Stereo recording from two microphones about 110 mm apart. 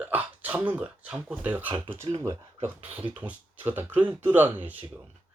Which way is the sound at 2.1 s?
45° right (ahead or behind).